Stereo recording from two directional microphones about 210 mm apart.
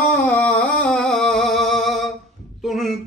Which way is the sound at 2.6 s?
Centre (ahead or behind).